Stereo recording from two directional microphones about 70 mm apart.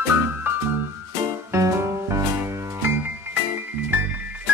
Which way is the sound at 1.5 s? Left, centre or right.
Right.